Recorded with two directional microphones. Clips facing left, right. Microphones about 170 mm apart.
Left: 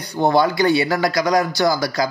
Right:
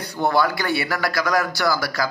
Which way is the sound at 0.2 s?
20° left (ahead or behind).